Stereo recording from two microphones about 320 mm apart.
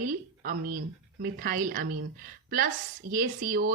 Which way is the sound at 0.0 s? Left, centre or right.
Right.